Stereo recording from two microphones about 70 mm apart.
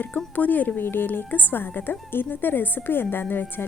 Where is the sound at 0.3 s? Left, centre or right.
Left.